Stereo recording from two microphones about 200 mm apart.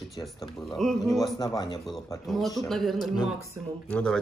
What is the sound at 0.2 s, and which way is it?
Speech, centre (ahead or behind).